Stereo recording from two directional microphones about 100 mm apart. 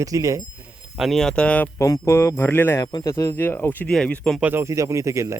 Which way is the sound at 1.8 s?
30° left (ahead or behind).